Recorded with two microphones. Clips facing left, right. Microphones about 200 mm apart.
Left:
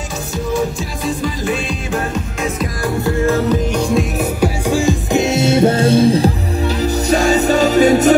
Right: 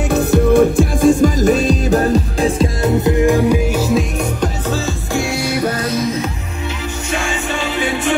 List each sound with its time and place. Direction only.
0.1 s music: 60° right (ahead or behind); by 8.1 s 40° left (ahead or behind)